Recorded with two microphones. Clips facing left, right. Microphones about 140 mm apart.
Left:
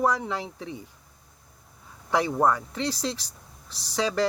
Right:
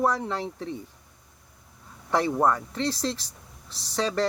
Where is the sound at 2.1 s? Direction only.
Centre (ahead or behind).